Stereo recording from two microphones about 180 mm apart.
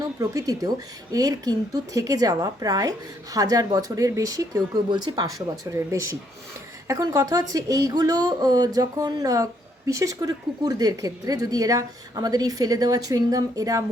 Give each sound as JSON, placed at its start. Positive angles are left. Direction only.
{"t": 0.0, "sound": "speech", "side_deg": -20}